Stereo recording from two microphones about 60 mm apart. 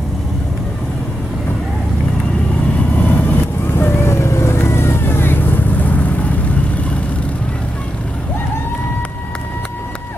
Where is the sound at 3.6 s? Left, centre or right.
Left.